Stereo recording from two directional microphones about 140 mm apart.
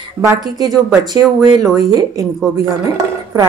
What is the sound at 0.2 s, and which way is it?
A woman's voice, 25° right (ahead or behind).